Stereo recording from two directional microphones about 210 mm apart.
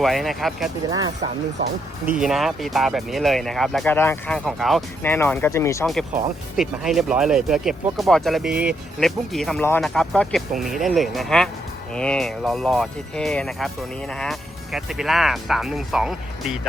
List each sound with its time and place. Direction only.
0.0 s speech: centre (ahead or behind)
0.9 s speech: 20° right (ahead or behind)
2.1 s speech: centre (ahead or behind)
4.4 s speech: centre (ahead or behind)
5.8 s speech: centre (ahead or behind)